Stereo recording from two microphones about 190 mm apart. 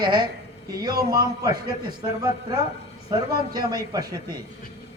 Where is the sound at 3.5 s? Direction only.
20° right (ahead or behind).